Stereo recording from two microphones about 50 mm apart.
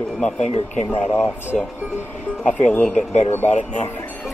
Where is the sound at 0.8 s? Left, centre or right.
Left.